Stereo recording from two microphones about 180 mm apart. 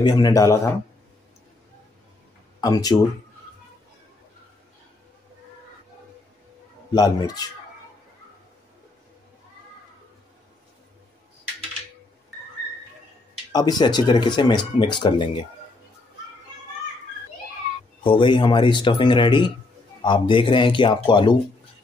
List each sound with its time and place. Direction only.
0.0 s speech: 20° left (ahead or behind)
2.6 s speech: 20° left (ahead or behind)
6.9 s speech: 20° left (ahead or behind)
13.5 s speech: 20° left (ahead or behind)
18.0 s speech: 30° left (ahead or behind)